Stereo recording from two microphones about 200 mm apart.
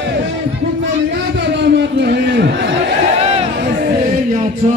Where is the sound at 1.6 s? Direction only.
60° right (ahead or behind).